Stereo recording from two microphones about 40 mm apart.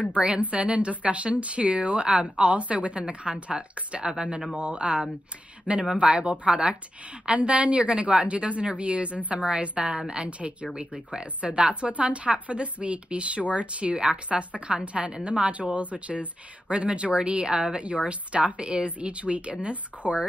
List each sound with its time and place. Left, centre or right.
0.4 s speech: right